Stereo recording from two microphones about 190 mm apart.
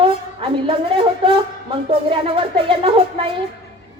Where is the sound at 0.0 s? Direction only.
30° right (ahead or behind).